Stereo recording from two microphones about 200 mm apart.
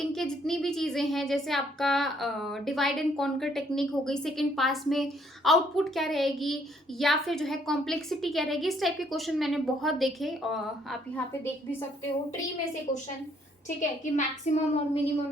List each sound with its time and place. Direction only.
0.0 s speech: centre (ahead or behind)
14.0 s child singing: 40° left (ahead or behind)